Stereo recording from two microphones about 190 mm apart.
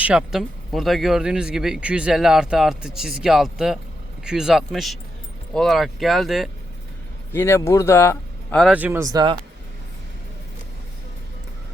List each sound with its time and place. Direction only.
0.0 s speech: 5° right (ahead or behind)
7.3 s speech: 15° left (ahead or behind)
8.5 s speech: 5° right (ahead or behind)
9.1 s speech: 25° right (ahead or behind)